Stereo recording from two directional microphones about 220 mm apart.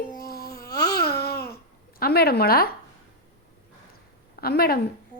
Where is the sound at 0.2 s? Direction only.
45° left (ahead or behind).